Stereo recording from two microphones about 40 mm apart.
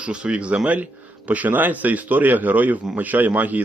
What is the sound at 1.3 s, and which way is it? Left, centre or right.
A man's voice, right.